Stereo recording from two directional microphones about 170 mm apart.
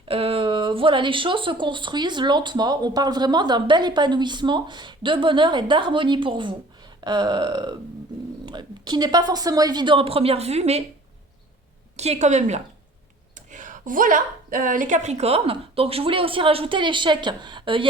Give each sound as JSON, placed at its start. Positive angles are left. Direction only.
{"t": 0.1, "sound": "speech", "side_deg": -35}
{"t": 11.9, "sound": "a woman's voice", "side_deg": -40}